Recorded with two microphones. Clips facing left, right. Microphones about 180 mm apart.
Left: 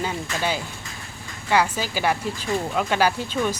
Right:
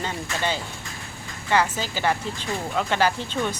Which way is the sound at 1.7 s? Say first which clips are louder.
Left 1 dB; 10° left (ahead or behind).